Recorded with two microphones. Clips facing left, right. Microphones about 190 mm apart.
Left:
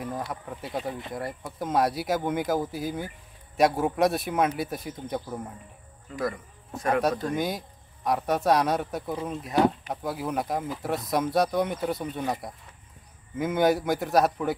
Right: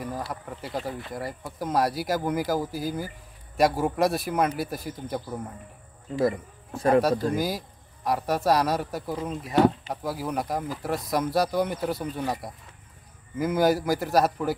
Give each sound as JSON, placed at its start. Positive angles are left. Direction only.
{"t": 0.0, "sound": "speech", "side_deg": 0}
{"t": 6.1, "sound": "speech", "side_deg": -30}
{"t": 7.3, "sound": "speech", "side_deg": 0}